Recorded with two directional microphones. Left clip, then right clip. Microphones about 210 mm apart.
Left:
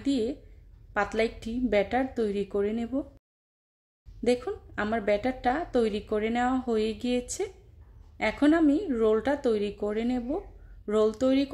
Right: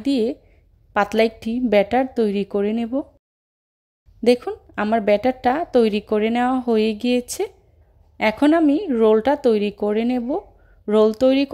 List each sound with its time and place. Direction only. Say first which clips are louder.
0.0 s a woman's voice: right 8 dB; 35° right (ahead or behind)
4.2 s a woman's voice: right 9 dB; 35° right (ahead or behind)